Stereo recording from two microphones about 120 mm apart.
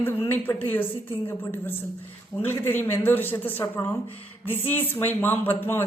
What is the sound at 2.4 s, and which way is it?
A woman's voice, 20° left (ahead or behind).